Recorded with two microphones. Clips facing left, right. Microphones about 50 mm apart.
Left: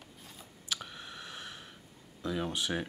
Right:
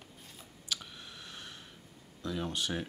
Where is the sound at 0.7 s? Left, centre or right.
Centre.